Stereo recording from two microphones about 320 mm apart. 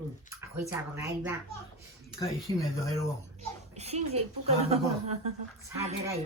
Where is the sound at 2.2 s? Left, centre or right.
Centre.